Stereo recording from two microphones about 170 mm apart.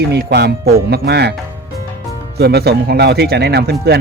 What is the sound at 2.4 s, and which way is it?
Speech, 70° right (ahead or behind).